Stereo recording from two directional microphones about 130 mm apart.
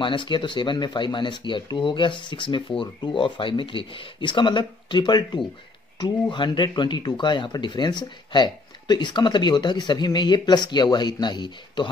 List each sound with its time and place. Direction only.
0.0 s speech: 40° left (ahead or behind)